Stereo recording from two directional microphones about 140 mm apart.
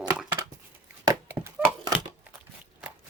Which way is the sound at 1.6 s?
10° right (ahead or behind).